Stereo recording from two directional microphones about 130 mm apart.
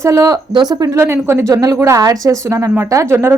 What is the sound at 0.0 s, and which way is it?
A woman's voice, 20° right (ahead or behind).